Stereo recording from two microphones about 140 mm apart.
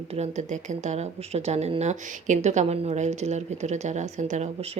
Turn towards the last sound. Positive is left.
turn(degrees=-55)  # may be behind; listen again after turning